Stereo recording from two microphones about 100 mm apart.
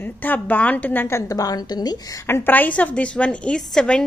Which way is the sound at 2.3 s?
20° left (ahead or behind).